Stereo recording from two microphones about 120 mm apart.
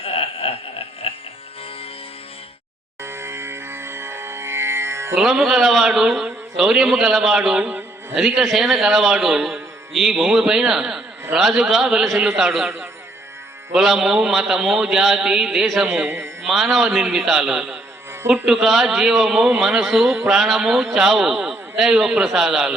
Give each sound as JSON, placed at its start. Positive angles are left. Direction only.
{"t": 0.0, "sound": "a sound", "side_deg": 50}
{"t": 3.0, "sound": "music", "side_deg": -20}
{"t": 5.1, "sound": "a man's voice", "side_deg": 0}
{"t": 13.7, "sound": "a man's voice", "side_deg": 0}
{"t": 16.0, "sound": "speech", "side_deg": -20}
{"t": 16.5, "sound": "a man's voice", "side_deg": 0}